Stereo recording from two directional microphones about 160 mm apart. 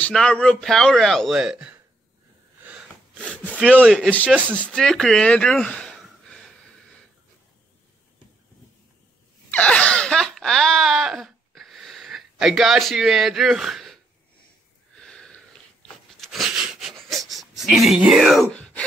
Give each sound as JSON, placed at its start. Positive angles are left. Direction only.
{"t": 0.0, "sound": "a man's voice", "side_deg": 5}
{"t": 3.4, "sound": "gasp", "side_deg": -5}
{"t": 3.8, "sound": "a man's voice", "side_deg": 0}
{"t": 4.6, "sound": "speech", "side_deg": 5}
{"t": 9.5, "sound": "a sound", "side_deg": 10}
{"t": 15.0, "sound": "sniff", "side_deg": 5}
{"t": 16.1, "sound": "wheeze", "side_deg": 0}